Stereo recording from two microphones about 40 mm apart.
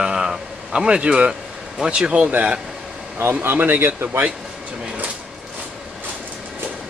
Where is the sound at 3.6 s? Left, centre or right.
Right.